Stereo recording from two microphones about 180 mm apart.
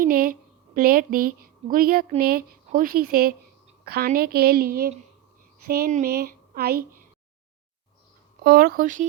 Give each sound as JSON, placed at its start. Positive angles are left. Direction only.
{"t": 0.0, "sound": "a woman's voice", "side_deg": -55}
{"t": 8.4, "sound": "speech", "side_deg": -55}